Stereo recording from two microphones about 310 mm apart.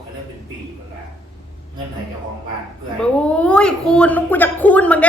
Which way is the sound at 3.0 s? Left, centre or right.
Centre.